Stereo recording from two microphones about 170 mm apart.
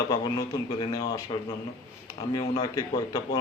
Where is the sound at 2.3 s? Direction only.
25° left (ahead or behind).